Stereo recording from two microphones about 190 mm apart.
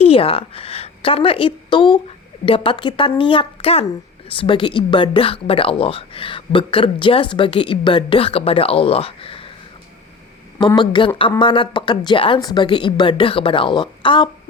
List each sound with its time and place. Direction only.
0.0 s a woman's voice: 30° left (ahead or behind)
10.8 s speech: 25° left (ahead or behind)